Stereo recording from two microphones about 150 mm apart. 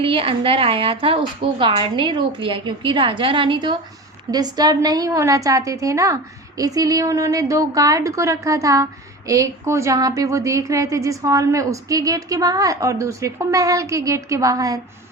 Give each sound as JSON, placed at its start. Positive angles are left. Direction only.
{"t": 0.0, "sound": "a woman's voice", "side_deg": -40}